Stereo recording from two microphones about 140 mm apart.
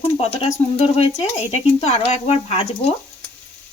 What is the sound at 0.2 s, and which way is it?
Speech, 50° left (ahead or behind).